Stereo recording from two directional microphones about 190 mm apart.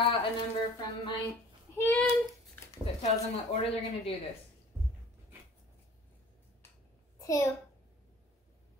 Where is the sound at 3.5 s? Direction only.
30° left (ahead or behind).